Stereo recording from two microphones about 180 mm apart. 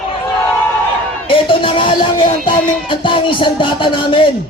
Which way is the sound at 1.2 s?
30° left (ahead or behind).